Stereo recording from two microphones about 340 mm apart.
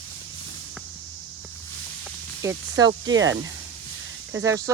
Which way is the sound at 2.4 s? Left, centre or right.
Centre.